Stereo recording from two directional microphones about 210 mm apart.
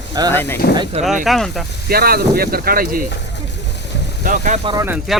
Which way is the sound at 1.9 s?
45° right (ahead or behind).